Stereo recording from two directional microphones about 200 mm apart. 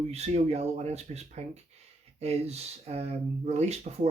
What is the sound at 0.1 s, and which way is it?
Speech, 30° right (ahead or behind).